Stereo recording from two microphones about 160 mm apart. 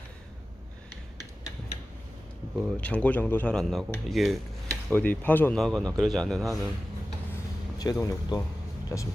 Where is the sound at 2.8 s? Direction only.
10° left (ahead or behind).